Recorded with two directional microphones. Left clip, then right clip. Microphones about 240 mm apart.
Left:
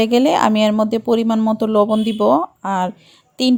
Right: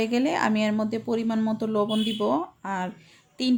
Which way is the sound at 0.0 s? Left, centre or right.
Left.